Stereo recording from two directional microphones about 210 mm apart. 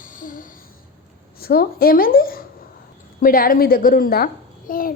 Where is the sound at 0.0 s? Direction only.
40° left (ahead or behind).